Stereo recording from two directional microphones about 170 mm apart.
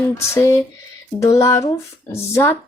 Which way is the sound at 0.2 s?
20° left (ahead or behind).